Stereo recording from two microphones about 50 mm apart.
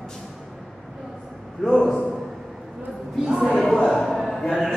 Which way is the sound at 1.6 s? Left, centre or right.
Centre.